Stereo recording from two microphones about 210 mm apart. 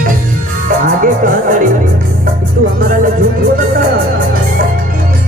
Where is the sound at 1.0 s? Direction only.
40° right (ahead or behind).